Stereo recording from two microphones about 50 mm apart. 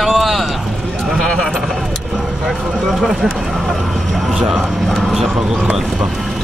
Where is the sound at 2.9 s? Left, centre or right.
Centre.